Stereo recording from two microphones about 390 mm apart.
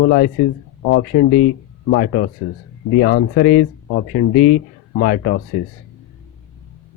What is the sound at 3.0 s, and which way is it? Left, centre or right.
Speech, left.